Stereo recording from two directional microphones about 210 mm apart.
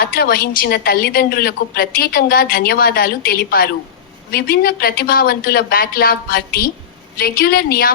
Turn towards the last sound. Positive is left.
turn(degrees=45)  # may be behind; listen again after turning